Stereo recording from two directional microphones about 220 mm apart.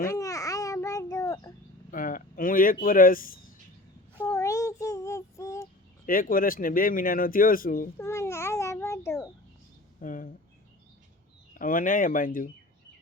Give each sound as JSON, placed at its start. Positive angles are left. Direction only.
{"t": 0.2, "sound": "babbling", "side_deg": 15}
{"t": 1.9, "sound": "a sound", "side_deg": 40}
{"t": 4.2, "sound": "child singing", "side_deg": 15}
{"t": 6.1, "sound": "speech", "side_deg": 40}
{"t": 7.9, "sound": "babbling", "side_deg": 10}
{"t": 10.0, "sound": "a sound", "side_deg": 35}
{"t": 11.5, "sound": "speech", "side_deg": 40}